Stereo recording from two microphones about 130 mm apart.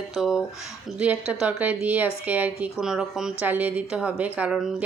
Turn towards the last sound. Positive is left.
turn(degrees=-5)  # may be behind; listen again after turning